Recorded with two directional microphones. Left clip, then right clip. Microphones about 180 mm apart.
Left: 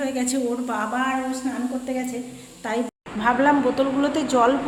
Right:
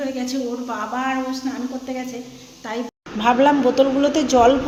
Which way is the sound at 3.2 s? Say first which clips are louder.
Right 3 dB; 10° right (ahead or behind).